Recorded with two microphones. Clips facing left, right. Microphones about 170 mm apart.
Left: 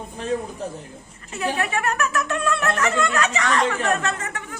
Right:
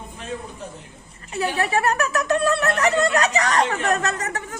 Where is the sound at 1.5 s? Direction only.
35° right (ahead or behind).